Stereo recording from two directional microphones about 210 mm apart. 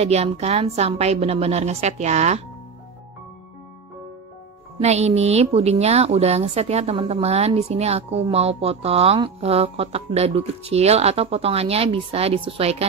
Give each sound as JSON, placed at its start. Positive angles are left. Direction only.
{"t": 0.0, "sound": "a woman's voice", "side_deg": -30}
{"t": 4.7, "sound": "a woman's voice", "side_deg": -30}